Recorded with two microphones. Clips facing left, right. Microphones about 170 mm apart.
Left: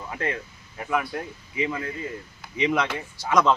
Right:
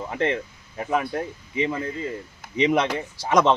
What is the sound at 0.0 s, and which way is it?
Speech, 25° right (ahead or behind).